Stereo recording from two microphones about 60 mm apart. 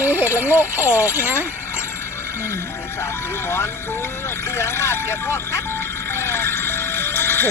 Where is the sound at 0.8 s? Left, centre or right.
Left.